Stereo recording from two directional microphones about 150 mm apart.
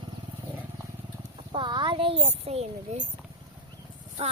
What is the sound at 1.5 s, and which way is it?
A child's voice, 30° right (ahead or behind).